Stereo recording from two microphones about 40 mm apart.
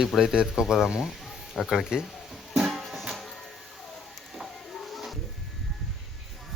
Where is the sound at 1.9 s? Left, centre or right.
Centre.